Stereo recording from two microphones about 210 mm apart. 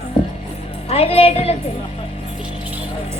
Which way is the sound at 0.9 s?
30° left (ahead or behind).